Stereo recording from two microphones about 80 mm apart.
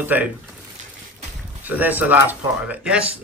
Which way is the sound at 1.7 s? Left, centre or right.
Right.